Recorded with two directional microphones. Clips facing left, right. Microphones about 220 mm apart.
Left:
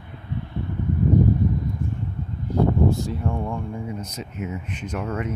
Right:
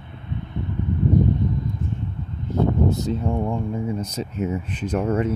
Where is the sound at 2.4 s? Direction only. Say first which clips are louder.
Even; 20° right (ahead or behind).